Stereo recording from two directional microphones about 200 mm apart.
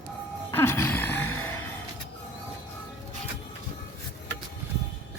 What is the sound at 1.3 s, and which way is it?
Music, 90° left.